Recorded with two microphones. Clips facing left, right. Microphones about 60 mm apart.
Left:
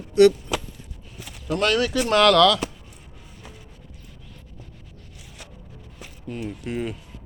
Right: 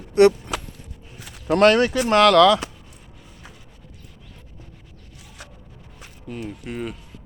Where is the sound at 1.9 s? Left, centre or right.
Centre.